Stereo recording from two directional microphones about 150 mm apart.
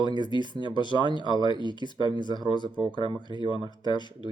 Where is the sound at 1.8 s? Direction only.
30° left (ahead or behind).